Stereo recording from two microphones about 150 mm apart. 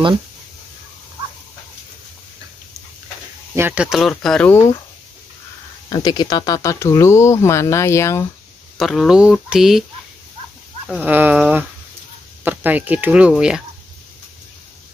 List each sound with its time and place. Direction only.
3.5 s speech: 10° right (ahead or behind)
5.9 s speech: 30° left (ahead or behind)
8.7 s speech: centre (ahead or behind)
11.0 s speech: 10° right (ahead or behind)